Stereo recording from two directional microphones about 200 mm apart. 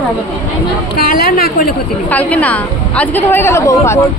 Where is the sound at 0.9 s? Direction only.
50° left (ahead or behind).